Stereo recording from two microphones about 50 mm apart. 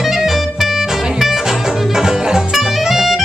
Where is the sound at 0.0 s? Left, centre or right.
Centre.